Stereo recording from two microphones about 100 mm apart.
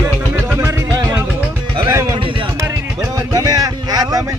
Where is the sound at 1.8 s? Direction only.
30° right (ahead or behind).